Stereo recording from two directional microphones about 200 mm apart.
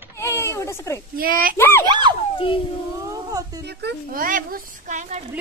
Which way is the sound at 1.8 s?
20° right (ahead or behind).